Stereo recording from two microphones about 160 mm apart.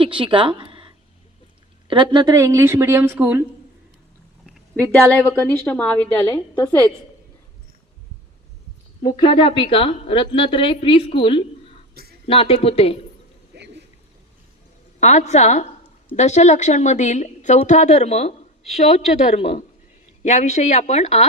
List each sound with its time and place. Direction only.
0.0 s a sound: 30° right (ahead or behind)
1.9 s a woman's voice: 30° right (ahead or behind); by 3.4 s 15° right (ahead or behind)
4.4 s a sound: centre (ahead or behind)
4.9 s a woman's voice: 10° left (ahead or behind)
9.0 s a woman's voice: 30° left (ahead or behind)
15.0 s a woman's voice: 45° left (ahead or behind)